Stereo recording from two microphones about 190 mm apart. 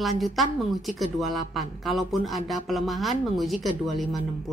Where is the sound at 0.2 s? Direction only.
Centre (ahead or behind).